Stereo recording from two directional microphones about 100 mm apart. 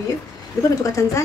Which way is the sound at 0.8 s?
30° left (ahead or behind).